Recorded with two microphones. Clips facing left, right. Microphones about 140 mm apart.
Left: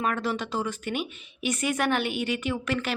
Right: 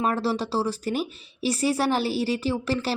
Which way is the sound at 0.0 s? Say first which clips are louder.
Right 3 dB; 35° right (ahead or behind).